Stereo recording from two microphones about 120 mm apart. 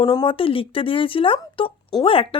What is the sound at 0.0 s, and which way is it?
A woman's voice, 45° left (ahead or behind).